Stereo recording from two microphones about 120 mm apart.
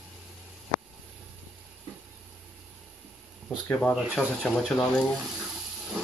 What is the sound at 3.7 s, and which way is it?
Speech, 10° left (ahead or behind).